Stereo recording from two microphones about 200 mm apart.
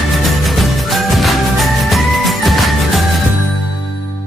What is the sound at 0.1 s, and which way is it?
Music, centre (ahead or behind).